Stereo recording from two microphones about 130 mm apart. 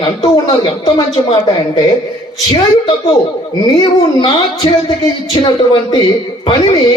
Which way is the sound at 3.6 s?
35° left (ahead or behind).